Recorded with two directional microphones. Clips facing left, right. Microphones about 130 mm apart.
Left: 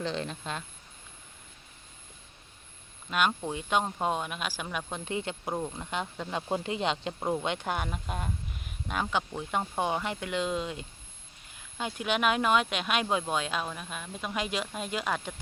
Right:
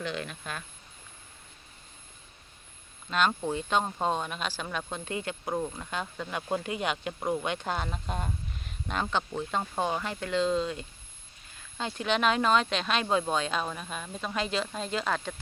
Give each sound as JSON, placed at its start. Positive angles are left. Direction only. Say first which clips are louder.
{"t": 0.0, "sound": "speech", "louder": "left 2 dB", "side_deg": 30}
{"t": 3.1, "sound": "speech", "louder": "right 1 dB", "side_deg": 10}